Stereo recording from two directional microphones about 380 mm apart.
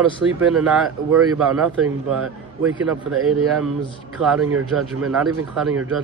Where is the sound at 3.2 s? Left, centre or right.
Right.